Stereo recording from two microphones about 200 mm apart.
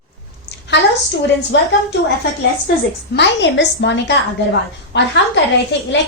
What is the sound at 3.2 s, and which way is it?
A woman's voice, 60° left (ahead or behind).